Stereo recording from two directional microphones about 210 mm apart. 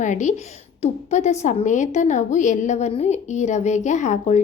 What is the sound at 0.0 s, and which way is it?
A woman's voice, 35° left (ahead or behind).